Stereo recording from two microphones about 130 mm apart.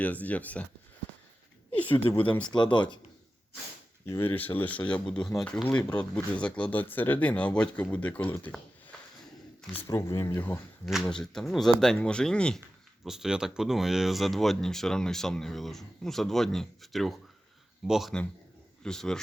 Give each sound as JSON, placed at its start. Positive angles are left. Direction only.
{"t": 0.0, "sound": "speech", "side_deg": 10}
{"t": 1.7, "sound": "a sound", "side_deg": 10}
{"t": 2.1, "sound": "speech", "side_deg": 10}
{"t": 2.5, "sound": "speech", "side_deg": 35}
{"t": 4.0, "sound": "speech", "side_deg": 20}
{"t": 5.6, "sound": "speech", "side_deg": 10}
{"t": 9.8, "sound": "speech", "side_deg": 25}
{"t": 11.0, "sound": "speech", "side_deg": 5}
{"t": 13.1, "sound": "speech", "side_deg": -5}